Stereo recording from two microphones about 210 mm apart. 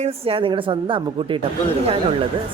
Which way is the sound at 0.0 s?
25° right (ahead or behind).